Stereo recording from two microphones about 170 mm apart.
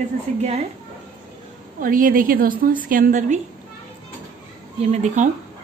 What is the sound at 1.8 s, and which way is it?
A woman's voice, 55° right (ahead or behind).